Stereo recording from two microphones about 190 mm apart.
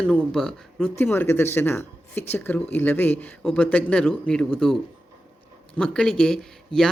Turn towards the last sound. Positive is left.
turn(degrees=0)  # may be behind; listen again after turning